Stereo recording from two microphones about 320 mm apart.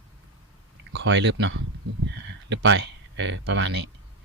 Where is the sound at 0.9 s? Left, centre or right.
Right.